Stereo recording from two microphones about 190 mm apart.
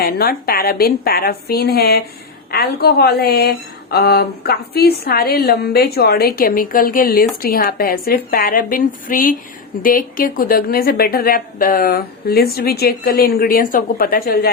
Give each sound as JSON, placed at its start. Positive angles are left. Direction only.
{"t": 0.0, "sound": "a woman's voice", "side_deg": 55}